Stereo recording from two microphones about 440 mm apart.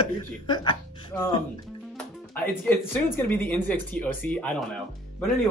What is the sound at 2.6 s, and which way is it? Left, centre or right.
Speech, centre.